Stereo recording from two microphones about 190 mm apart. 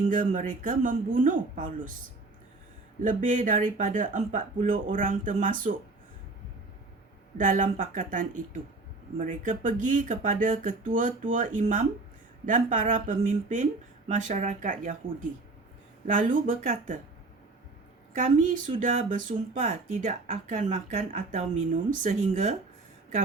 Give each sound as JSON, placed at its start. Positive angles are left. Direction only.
{"t": 0.1, "sound": "speech", "side_deg": -40}
{"t": 3.0, "sound": "speech", "side_deg": -45}
{"t": 7.3, "sound": "speech", "side_deg": -45}
{"t": 16.1, "sound": "speech", "side_deg": -40}
{"t": 18.1, "sound": "speech", "side_deg": -40}